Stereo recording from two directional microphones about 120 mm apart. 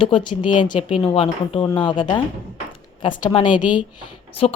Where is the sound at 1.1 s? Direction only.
50° left (ahead or behind).